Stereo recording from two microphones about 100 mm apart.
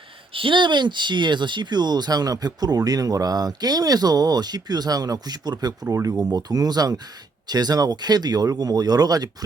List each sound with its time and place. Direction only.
0.3 s speech: 55° right (ahead or behind); by 9.3 s 40° right (ahead or behind)